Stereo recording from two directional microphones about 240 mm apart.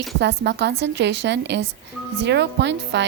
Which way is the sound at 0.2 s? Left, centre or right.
Right.